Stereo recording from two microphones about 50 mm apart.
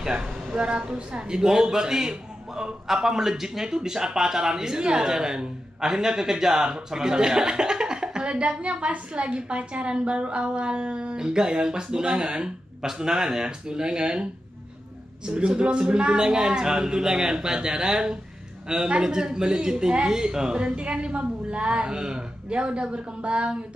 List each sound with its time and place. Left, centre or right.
0.0 s speech: centre
15.2 s a woman's voice: centre